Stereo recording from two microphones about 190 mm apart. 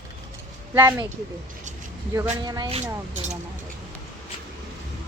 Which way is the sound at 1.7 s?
40° right (ahead or behind).